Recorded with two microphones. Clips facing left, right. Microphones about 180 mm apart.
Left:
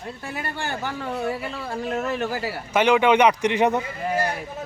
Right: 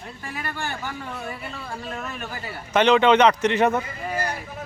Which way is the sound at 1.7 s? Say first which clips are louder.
Left 8 dB; 45° left (ahead or behind).